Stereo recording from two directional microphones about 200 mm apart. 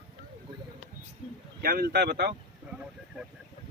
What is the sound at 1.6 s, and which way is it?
Speech, 50° right (ahead or behind).